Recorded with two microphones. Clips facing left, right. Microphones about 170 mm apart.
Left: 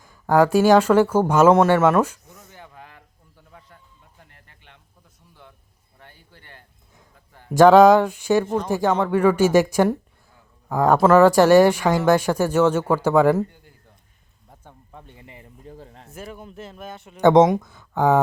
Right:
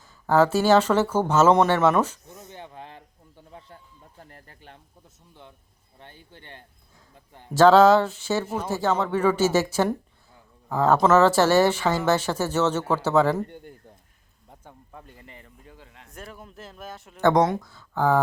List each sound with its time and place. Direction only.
0.0 s speech: 15° left (ahead or behind)
2.3 s snake: 20° right (ahead or behind)
4.2 s speech: 40° right (ahead or behind)
5.3 s speech: 20° right (ahead or behind)
7.5 s speech: 15° left (ahead or behind)
8.4 s speech: 5° right (ahead or behind)
8.7 s speech: 15° left (ahead or behind)
14.5 s a sound: 5° right (ahead or behind)
15.6 s a sound: 35° left (ahead or behind)
16.1 s speech: centre (ahead or behind)
17.2 s speech: 20° left (ahead or behind)